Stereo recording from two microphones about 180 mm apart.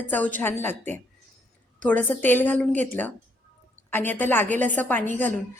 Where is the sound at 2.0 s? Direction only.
10° left (ahead or behind).